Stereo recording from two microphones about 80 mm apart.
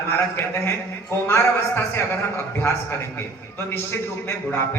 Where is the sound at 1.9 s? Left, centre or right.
Left.